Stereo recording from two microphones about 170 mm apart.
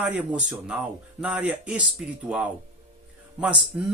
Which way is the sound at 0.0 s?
10° right (ahead or behind).